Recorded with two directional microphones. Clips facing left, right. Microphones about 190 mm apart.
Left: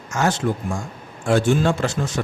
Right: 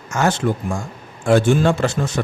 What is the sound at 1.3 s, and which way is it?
Speech, 60° right (ahead or behind).